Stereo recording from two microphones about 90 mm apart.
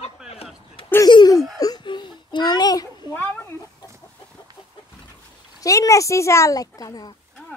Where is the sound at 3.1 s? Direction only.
25° left (ahead or behind).